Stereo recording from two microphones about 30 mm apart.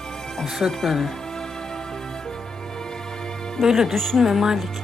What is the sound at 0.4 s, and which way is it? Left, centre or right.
Speech, centre.